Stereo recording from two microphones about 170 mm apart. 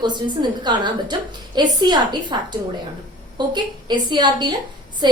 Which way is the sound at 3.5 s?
25° right (ahead or behind).